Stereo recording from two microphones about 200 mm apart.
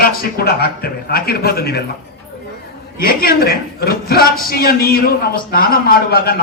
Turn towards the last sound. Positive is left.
turn(degrees=50)  # may be behind; listen again after turning